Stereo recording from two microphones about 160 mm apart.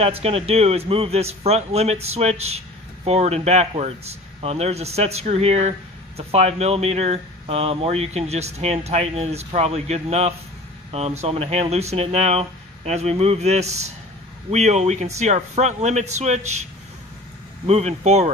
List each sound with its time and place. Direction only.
0.0 s speech: 40° right (ahead or behind)
17.6 s speech: 40° right (ahead or behind)